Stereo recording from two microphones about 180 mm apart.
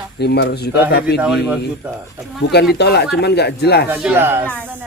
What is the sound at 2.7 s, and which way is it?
Speech, 65° left (ahead or behind).